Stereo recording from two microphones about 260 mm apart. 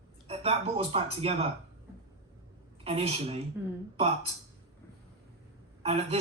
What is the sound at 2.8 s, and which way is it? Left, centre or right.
Speech, right.